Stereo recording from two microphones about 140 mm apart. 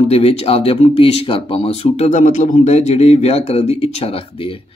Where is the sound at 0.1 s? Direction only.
45° left (ahead or behind).